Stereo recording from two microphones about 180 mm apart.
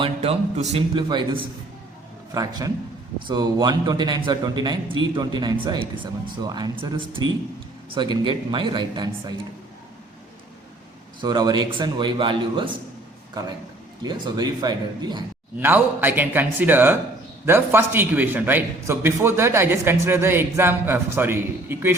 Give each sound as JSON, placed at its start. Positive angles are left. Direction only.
{"t": 0.0, "sound": "speech", "side_deg": -35}
{"t": 0.9, "sound": "a man's voice", "side_deg": -25}
{"t": 11.2, "sound": "a man's voice", "side_deg": -20}
{"t": 15.5, "sound": "a man's voice", "side_deg": -10}